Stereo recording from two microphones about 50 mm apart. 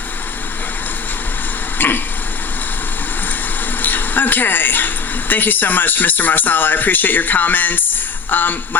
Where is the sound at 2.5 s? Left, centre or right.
Left.